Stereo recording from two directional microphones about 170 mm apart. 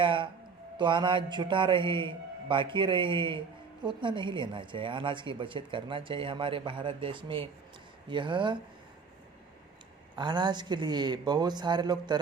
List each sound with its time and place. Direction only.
0.0 s speech: 30° right (ahead or behind)
10.2 s speech: 25° right (ahead or behind)